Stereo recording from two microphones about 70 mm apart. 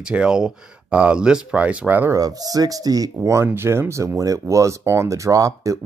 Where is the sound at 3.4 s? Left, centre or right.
Right.